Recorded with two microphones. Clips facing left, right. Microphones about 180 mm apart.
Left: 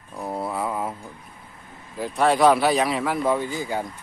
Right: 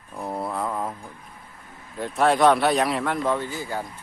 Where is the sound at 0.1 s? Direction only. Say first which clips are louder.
Left 1 dB; centre (ahead or behind).